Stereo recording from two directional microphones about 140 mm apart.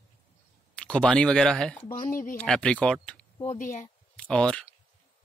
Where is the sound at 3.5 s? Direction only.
65° left (ahead or behind).